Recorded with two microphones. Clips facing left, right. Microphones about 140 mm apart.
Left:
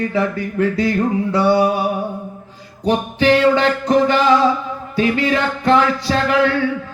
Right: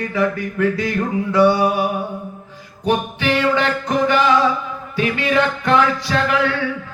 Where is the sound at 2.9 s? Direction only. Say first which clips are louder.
Left 4 dB; 35° left (ahead or behind).